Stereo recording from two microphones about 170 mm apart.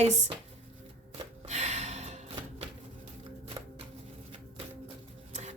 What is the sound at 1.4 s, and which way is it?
Gasp, 40° right (ahead or behind).